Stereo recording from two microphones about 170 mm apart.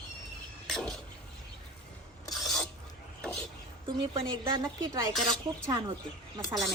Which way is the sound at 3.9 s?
30° right (ahead or behind).